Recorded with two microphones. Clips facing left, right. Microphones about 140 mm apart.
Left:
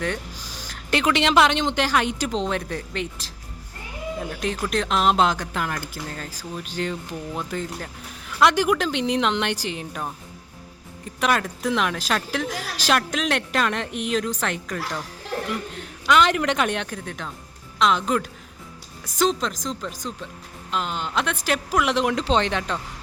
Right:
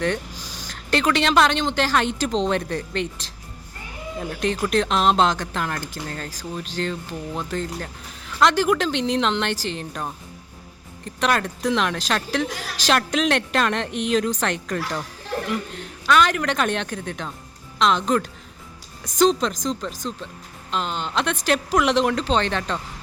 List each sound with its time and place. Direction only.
0.7 s a woman's voice: 10° left (ahead or behind)
16.0 s a woman's voice: 20° left (ahead or behind)